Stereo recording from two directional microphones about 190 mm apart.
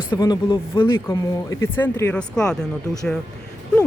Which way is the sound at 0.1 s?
20° left (ahead or behind).